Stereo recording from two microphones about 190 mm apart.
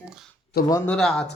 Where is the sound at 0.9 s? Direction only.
Centre (ahead or behind).